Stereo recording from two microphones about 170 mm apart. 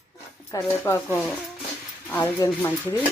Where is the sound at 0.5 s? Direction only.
15° left (ahead or behind).